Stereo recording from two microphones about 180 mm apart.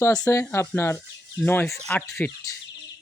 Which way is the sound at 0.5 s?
15° left (ahead or behind).